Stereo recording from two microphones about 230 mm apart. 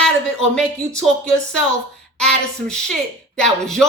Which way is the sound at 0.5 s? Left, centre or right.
Centre.